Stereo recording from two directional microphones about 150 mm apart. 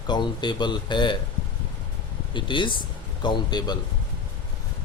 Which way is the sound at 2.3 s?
35° left (ahead or behind).